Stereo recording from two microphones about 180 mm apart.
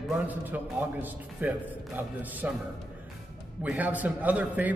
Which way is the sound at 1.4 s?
10° right (ahead or behind).